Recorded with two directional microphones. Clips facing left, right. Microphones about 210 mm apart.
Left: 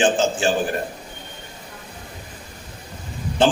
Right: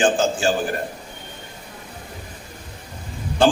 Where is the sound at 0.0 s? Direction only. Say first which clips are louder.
Even; 20° left (ahead or behind).